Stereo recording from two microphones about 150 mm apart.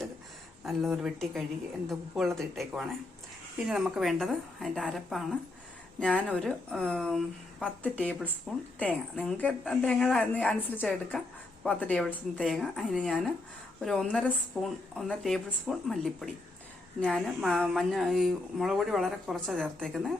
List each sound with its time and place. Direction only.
0.6 s a woman's voice: centre (ahead or behind)